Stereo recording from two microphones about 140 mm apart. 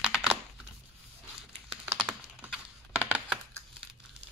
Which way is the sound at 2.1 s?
10° right (ahead or behind).